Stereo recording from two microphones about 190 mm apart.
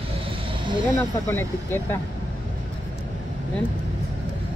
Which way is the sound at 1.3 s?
10° left (ahead or behind).